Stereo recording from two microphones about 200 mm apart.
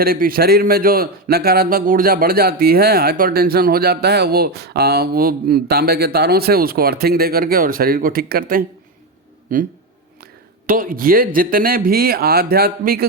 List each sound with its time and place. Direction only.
0.0 s a man's voice: 50° right (ahead or behind)
10.7 s a man's voice: 45° right (ahead or behind)